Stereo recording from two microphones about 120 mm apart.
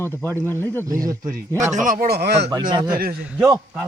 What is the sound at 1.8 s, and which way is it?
Speech, 90° right.